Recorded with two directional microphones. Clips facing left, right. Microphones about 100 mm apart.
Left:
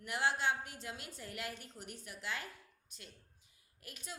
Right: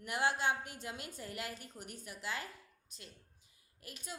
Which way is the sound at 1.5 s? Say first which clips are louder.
Right 1 dB; 45° right (ahead or behind).